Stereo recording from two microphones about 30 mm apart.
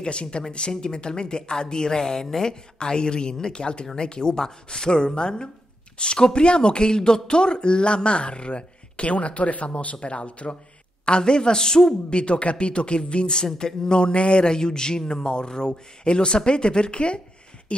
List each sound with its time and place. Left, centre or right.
0.0 s a man's voice: left
9.9 s a man's voice: left
11.1 s a man's voice: left
12.1 s a man's voice: left
13.6 s a man's voice: left